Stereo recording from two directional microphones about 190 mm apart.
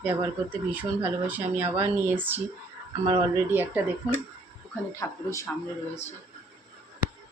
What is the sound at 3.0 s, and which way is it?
Speech, 20° right (ahead or behind).